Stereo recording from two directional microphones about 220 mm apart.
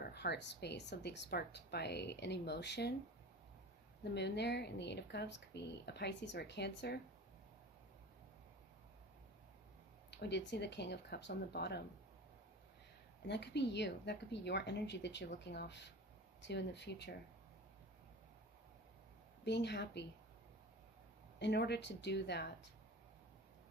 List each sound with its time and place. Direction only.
0.1 s speech: 50° left (ahead or behind)
4.1 s speech: 50° left (ahead or behind)
10.1 s speech: 50° left (ahead or behind)
13.2 s speech: 50° left (ahead or behind)
19.5 s speech: 50° left (ahead or behind)
21.3 s speech: 50° left (ahead or behind)